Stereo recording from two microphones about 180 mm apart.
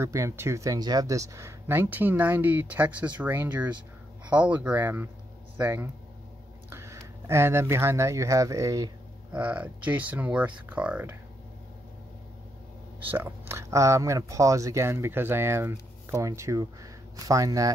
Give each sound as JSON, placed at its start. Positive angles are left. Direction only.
{"t": 0.0, "sound": "speech", "side_deg": -15}
{"t": 9.3, "sound": "speech", "side_deg": -10}
{"t": 13.1, "sound": "speech", "side_deg": -15}